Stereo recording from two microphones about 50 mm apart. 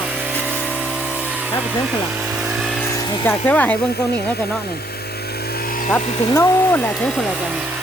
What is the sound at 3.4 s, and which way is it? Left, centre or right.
Speech, left.